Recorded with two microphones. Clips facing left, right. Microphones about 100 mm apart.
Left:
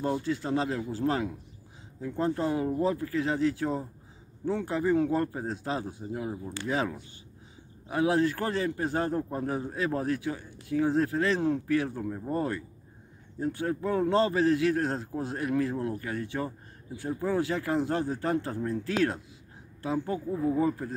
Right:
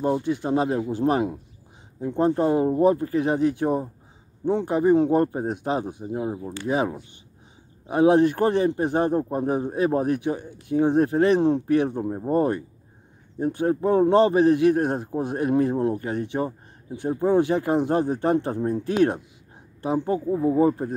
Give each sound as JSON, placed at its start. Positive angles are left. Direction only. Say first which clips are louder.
{"t": 0.0, "sound": "a man's voice", "louder": "right 6 dB", "side_deg": -20}